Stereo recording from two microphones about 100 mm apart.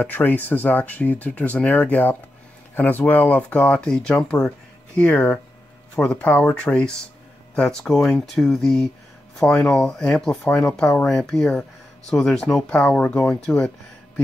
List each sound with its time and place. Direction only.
0.0 s speech: 20° left (ahead or behind)
10.4 s speech: 30° left (ahead or behind)
10.8 s speech: 10° left (ahead or behind)